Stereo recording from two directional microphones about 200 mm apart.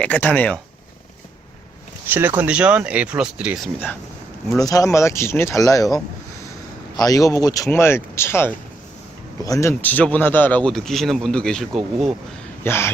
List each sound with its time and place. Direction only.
0.0 s speech: 5° left (ahead or behind)
2.0 s a man's voice: 10° right (ahead or behind)
4.6 s speech: 15° left (ahead or behind)
7.0 s a man's voice: 15° left (ahead or behind)